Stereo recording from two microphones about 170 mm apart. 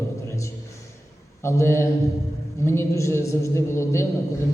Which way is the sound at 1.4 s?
15° left (ahead or behind).